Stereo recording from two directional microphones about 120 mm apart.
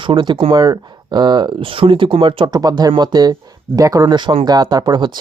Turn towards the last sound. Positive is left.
turn(degrees=-35)  # may be behind; listen again after turning